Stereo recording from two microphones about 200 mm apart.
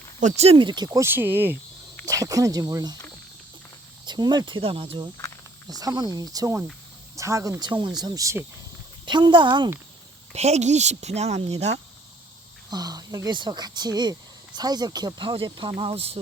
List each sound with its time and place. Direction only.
0.2 s speech: 35° right (ahead or behind); by 3.0 s 20° right (ahead or behind)
4.0 s a woman's voice: 20° right (ahead or behind)
12.7 s speech: 20° right (ahead or behind)